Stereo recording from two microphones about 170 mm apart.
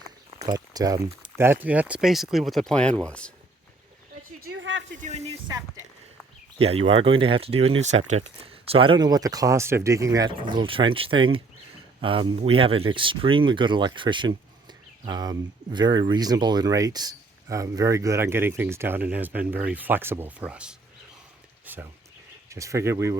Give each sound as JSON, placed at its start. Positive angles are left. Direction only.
{"t": 0.4, "sound": "speech", "side_deg": -25}
{"t": 4.4, "sound": "a sound", "side_deg": -75}
{"t": 4.9, "sound": "speech", "side_deg": -45}
{"t": 6.6, "sound": "speech", "side_deg": -35}
{"t": 21.7, "sound": "a sound", "side_deg": -10}
{"t": 22.4, "sound": "speech", "side_deg": -20}